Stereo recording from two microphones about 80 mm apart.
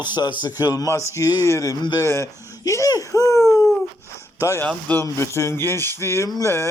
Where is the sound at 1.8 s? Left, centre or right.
Left.